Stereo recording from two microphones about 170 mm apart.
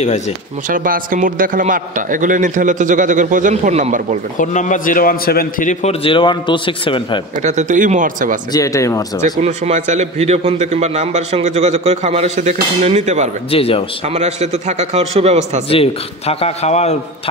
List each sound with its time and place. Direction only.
0.7 s a man's voice: 55° right (ahead or behind)
4.4 s a man's voice: 45° left (ahead or behind)
6.0 s a man's voice: 30° left (ahead or behind)
7.4 s a man's voice: 45° right (ahead or behind)
8.5 s a man's voice: 20° left (ahead or behind)
9.2 s a man's voice: 45° right (ahead or behind)
13.5 s a man's voice: 35° left (ahead or behind)
14.0 s a man's voice: 40° right (ahead or behind)
15.7 s a man's voice: 35° left (ahead or behind)